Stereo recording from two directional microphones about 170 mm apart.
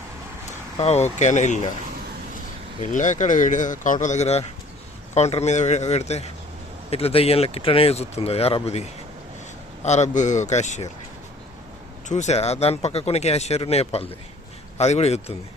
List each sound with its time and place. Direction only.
0.8 s speech: 40° left (ahead or behind)
2.8 s speech: 45° left (ahead or behind)
12.0 s speech: 45° left (ahead or behind)